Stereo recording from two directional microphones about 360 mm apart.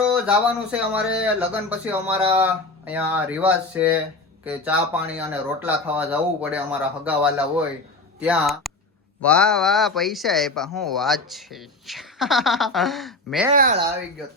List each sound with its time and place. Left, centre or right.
0.0 s speech: centre
13.5 s speech: right